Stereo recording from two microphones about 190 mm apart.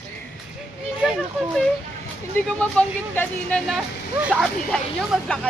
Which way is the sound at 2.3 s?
10° left (ahead or behind).